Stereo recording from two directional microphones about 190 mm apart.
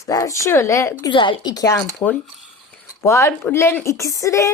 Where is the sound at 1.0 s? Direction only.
25° left (ahead or behind).